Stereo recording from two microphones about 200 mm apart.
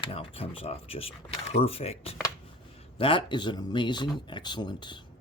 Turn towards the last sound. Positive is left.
turn(degrees=20)  # may be behind; listen again after turning